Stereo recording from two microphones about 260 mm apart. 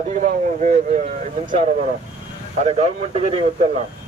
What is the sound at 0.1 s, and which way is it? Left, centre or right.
A man's voice, right.